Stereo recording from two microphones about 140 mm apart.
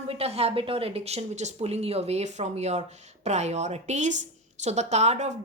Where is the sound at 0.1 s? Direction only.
45° right (ahead or behind).